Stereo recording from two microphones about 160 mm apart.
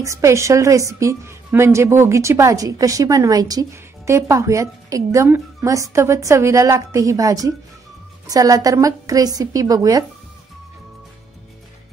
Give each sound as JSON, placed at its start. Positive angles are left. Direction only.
{"t": 0.0, "sound": "a woman's voice", "side_deg": -20}